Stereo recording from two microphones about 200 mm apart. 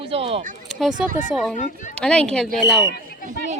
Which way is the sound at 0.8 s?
Centre (ahead or behind).